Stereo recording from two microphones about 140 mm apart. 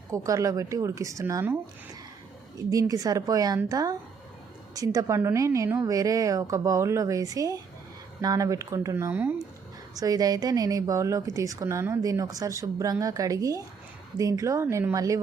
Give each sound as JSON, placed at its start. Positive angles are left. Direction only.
{"t": 0.1, "sound": "speech", "side_deg": -20}
{"t": 2.6, "sound": "speech", "side_deg": -25}